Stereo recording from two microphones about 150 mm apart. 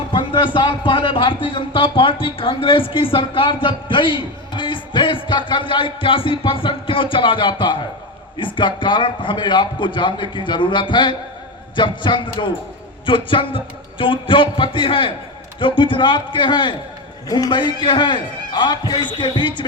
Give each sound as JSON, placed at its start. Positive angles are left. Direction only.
{"t": 0.1, "sound": "a man's voice", "side_deg": 35}